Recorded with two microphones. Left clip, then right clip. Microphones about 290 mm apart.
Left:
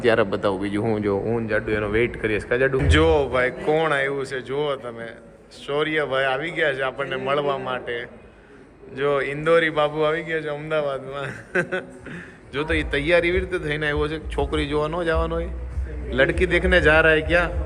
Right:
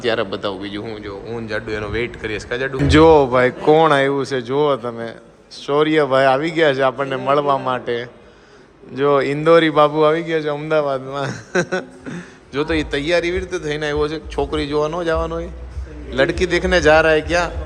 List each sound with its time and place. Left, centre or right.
0.0 s a man's voice: centre
9.0 s a man's voice: centre